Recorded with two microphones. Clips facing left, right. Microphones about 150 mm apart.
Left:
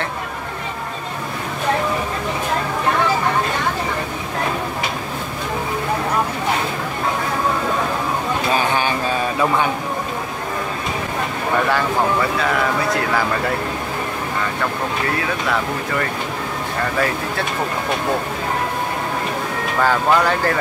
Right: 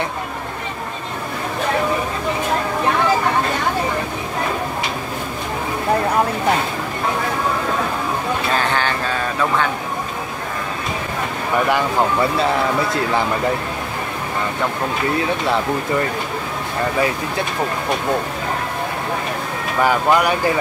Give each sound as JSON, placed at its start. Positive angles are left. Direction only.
{"t": 8.5, "sound": "a sound", "side_deg": 15}
{"t": 12.4, "sound": "speech", "side_deg": -25}
{"t": 19.8, "sound": "speech", "side_deg": -15}